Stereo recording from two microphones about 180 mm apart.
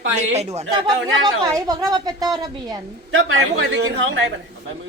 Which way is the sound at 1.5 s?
20° right (ahead or behind).